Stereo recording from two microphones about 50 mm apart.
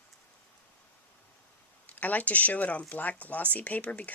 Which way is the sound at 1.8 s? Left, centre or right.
Left.